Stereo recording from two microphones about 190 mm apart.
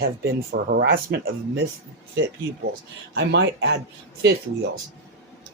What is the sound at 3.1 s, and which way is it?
Speech, 65° right (ahead or behind).